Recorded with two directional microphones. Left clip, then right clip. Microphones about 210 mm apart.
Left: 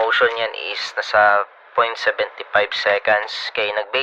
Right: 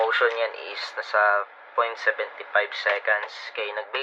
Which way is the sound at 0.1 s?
50° left (ahead or behind).